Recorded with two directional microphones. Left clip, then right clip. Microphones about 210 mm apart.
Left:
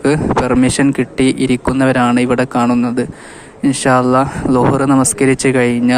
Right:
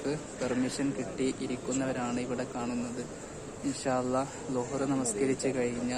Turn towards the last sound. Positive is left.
turn(degrees=40)  # may be behind; listen again after turning